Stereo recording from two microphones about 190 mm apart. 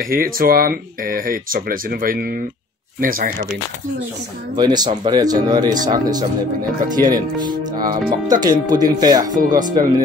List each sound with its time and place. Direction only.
0.0 s speech: 50° right (ahead or behind)
4.6 s speech: 20° right (ahead or behind)
7.8 s speech: 45° right (ahead or behind)
8.4 s speech: 20° right (ahead or behind)